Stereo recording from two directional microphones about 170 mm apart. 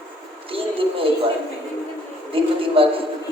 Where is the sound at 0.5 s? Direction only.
30° right (ahead or behind).